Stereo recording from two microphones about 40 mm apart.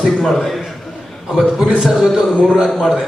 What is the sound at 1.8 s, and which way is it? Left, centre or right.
Speech, centre.